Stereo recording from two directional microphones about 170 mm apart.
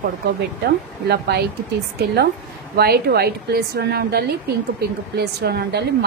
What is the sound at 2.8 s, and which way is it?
A woman's voice, 65° right (ahead or behind).